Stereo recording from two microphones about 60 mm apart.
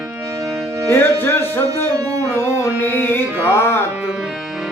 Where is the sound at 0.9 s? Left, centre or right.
Left.